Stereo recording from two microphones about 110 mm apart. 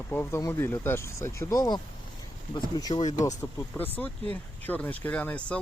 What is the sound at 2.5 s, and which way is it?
Speech, 35° left (ahead or behind).